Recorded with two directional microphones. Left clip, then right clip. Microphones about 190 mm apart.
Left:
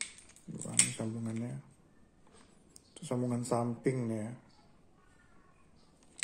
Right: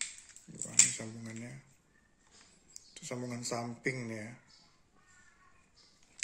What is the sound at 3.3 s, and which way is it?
A man's voice, 15° left (ahead or behind).